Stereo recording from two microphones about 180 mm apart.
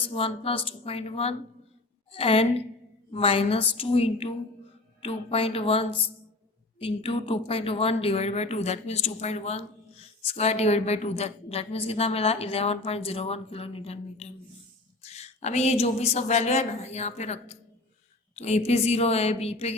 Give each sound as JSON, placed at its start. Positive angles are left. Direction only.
{"t": 0.1, "sound": "a woman's voice", "side_deg": 30}